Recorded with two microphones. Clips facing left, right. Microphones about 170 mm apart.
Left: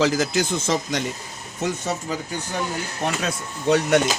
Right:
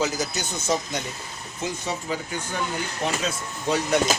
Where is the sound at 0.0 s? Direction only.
90° left.